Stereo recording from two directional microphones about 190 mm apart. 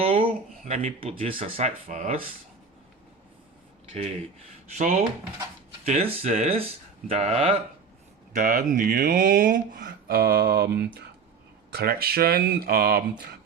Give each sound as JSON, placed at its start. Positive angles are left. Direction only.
{"t": 0.0, "sound": "speech", "side_deg": -30}
{"t": 4.7, "sound": "speech", "side_deg": -40}
{"t": 8.3, "sound": "speech", "side_deg": -45}